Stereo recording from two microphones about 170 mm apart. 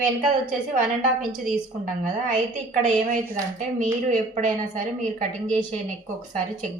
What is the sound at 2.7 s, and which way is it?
A woman's voice, 50° right (ahead or behind).